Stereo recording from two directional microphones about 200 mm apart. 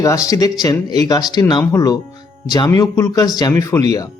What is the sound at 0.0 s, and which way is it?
Speech, 15° left (ahead or behind).